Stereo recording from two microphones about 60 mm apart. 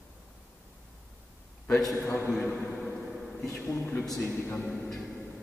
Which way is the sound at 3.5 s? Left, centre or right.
Left.